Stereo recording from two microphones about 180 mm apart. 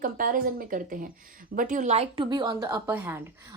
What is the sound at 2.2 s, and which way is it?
Speech, 25° right (ahead or behind).